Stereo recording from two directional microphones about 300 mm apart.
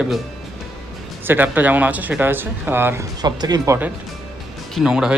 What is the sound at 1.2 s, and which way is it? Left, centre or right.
Speech, centre.